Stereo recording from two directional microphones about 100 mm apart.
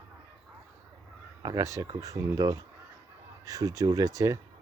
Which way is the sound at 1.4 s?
35° right (ahead or behind).